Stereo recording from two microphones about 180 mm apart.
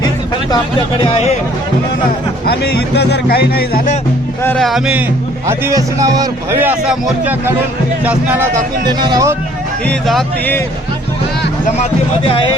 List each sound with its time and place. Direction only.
0.5 s speech: 30° left (ahead or behind)
2.5 s speech: 65° left (ahead or behind)
4.4 s speech: centre (ahead or behind)
5.5 s a man's voice: 15° right (ahead or behind)
8.8 s speech: 25° right (ahead or behind)
9.8 s speech: 5° left (ahead or behind)